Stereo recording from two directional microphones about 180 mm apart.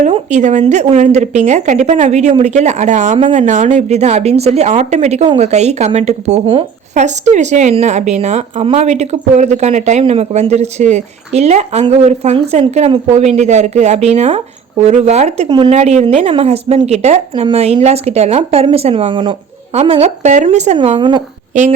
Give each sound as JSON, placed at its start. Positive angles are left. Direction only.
{"t": 0.0, "sound": "a woman's voice", "side_deg": -40}